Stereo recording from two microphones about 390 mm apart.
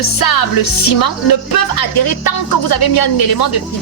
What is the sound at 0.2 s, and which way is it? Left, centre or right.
Speech, left.